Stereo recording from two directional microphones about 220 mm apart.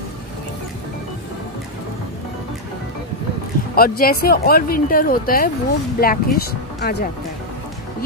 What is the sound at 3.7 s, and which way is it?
Speech, 40° left (ahead or behind).